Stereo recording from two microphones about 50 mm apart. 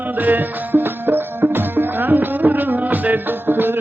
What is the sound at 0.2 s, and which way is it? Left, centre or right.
Music, right.